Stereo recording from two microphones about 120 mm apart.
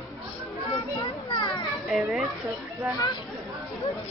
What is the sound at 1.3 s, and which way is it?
Children playing, 40° left (ahead or behind).